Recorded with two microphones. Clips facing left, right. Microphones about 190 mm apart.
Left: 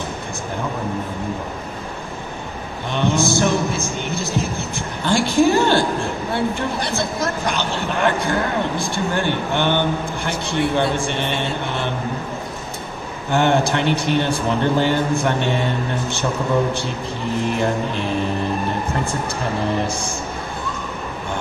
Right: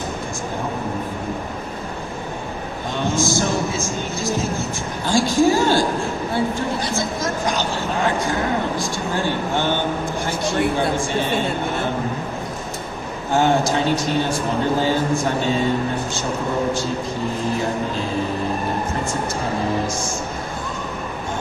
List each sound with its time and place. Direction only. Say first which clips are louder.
2.9 s music: left 2 dB; 65° left (ahead or behind)
6.8 s a sound: left 1 dB; 65° left (ahead or behind)
13.3 s a man's voice: even; 65° left (ahead or behind)